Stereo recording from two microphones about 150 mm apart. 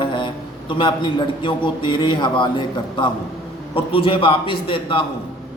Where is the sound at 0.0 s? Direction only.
30° left (ahead or behind).